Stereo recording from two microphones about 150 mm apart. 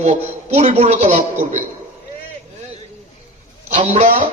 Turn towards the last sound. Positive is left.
turn(degrees=-45)  # may be behind; listen again after turning